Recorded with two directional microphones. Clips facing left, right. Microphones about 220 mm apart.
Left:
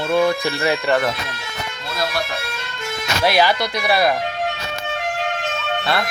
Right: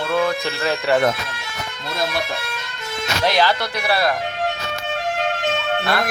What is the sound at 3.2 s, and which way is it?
Speech, 10° left (ahead or behind).